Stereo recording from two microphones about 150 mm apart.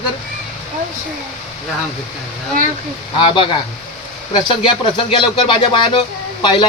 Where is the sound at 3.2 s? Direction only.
35° left (ahead or behind).